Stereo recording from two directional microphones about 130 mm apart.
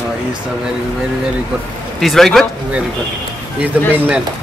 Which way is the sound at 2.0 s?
5° left (ahead or behind).